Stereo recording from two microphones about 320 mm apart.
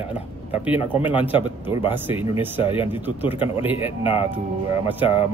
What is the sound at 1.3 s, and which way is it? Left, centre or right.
Speech, centre.